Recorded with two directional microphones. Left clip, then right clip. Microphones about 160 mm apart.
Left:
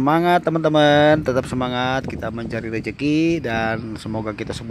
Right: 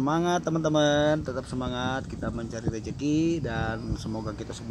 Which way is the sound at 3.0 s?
15° left (ahead or behind).